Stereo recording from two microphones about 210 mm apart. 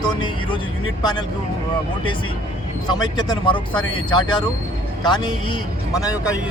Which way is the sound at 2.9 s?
20° left (ahead or behind).